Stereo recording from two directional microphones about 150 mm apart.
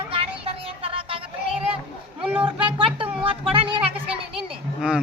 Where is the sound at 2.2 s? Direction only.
10° right (ahead or behind).